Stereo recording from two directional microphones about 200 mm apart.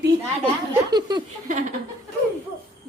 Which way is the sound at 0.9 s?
20° right (ahead or behind).